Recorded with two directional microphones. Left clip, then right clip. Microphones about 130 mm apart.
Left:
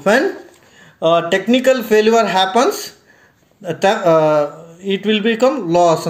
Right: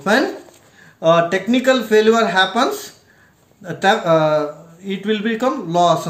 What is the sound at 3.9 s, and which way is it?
Speech, 20° right (ahead or behind).